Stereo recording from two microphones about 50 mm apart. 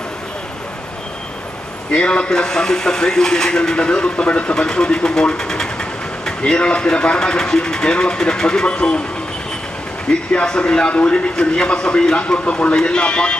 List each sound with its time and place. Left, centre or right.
1.9 s speech: centre
10.3 s a man's voice: centre